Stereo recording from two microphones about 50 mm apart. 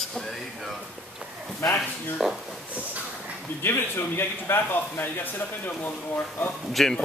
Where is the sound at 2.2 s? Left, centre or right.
Centre.